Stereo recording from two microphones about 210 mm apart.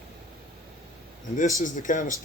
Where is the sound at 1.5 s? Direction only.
40° left (ahead or behind).